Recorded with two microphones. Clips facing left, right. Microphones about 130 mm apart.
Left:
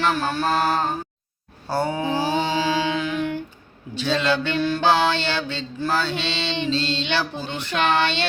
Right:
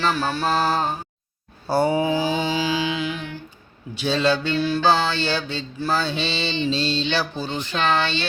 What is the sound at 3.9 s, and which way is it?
Mantra, 15° right (ahead or behind).